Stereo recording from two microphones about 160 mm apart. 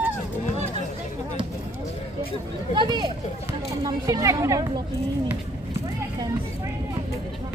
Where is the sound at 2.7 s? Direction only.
30° right (ahead or behind).